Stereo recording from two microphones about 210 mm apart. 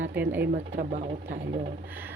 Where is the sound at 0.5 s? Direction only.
55° right (ahead or behind).